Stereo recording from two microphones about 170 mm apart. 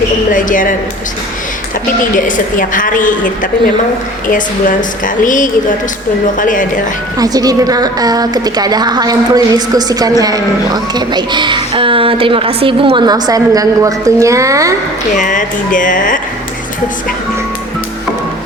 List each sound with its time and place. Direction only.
0.3 s a woman's voice: 50° left (ahead or behind)
2.1 s a woman's voice: 50° left (ahead or behind)
5.0 s a woman's voice: 50° left (ahead or behind)
7.2 s a woman's voice: 20° right (ahead or behind)
15.1 s a woman's voice: 50° left (ahead or behind)